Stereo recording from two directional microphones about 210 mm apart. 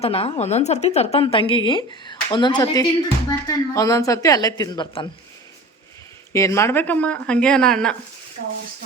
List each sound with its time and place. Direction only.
0.0 s a woman's voice: 25° left (ahead or behind)
6.3 s speech: 15° left (ahead or behind)